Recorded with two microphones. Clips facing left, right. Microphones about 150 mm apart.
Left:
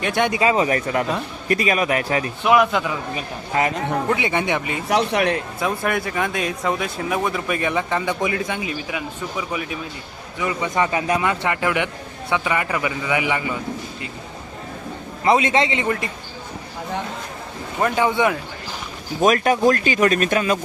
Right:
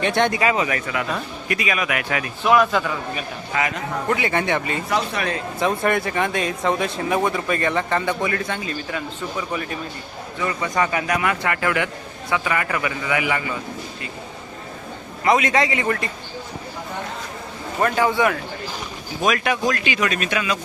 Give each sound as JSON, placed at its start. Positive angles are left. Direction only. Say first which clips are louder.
{"t": 0.0, "sound": "speech", "louder": "right 1 dB", "side_deg": 5}
{"t": 0.3, "sound": "speech", "louder": "left 2 dB", "side_deg": 25}
{"t": 2.4, "sound": "speech", "louder": "even", "side_deg": 10}
{"t": 3.2, "sound": "speech", "louder": "left 3 dB", "side_deg": 35}
{"t": 4.1, "sound": "speech", "louder": "right 3 dB", "side_deg": 20}
{"t": 4.9, "sound": "speech", "louder": "left 7 dB", "side_deg": 70}
{"t": 5.5, "sound": "speech", "louder": "right 2 dB", "side_deg": 0}
{"t": 10.4, "sound": "a man's voice", "louder": "left 1 dB", "side_deg": 20}
{"t": 15.2, "sound": "a man's voice", "louder": "left 1 dB", "side_deg": 30}
{"t": 17.7, "sound": "a man's voice", "louder": "even", "side_deg": 15}
{"t": 19.2, "sound": "speech", "louder": "left 5 dB", "side_deg": 40}